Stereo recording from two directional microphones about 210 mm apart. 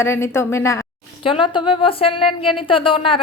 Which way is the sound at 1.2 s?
25° left (ahead or behind).